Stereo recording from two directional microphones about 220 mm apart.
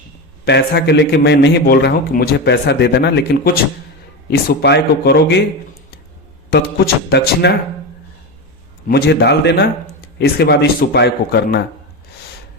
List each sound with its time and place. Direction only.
0.4 s a man's voice: 50° left (ahead or behind)
6.5 s a man's voice: 50° left (ahead or behind)
8.9 s a man's voice: 50° left (ahead or behind)